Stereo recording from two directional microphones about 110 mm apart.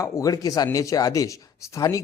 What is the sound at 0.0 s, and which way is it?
A man's voice, 30° left (ahead or behind).